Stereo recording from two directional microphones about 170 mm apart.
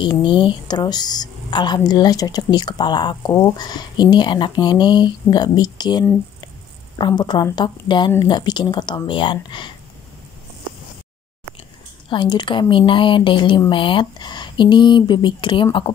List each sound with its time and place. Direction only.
0.0 s a woman's voice: 30° left (ahead or behind)
12.1 s a woman's voice: 25° left (ahead or behind)